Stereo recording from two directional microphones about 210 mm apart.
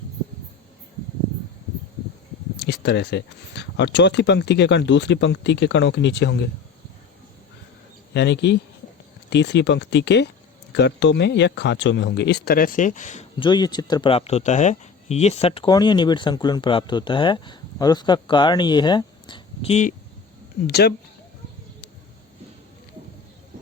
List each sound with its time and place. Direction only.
2.6 s speech: 55° left (ahead or behind)
8.1 s speech: 55° left (ahead or behind); by 13.2 s 35° left (ahead or behind)
13.4 s speech: 20° left (ahead or behind)
20.7 s speech: 50° left (ahead or behind)